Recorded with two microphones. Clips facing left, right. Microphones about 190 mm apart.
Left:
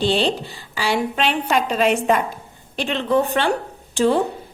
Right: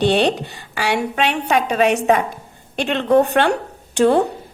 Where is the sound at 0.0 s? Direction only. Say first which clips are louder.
Right 3 dB; 65° right (ahead or behind).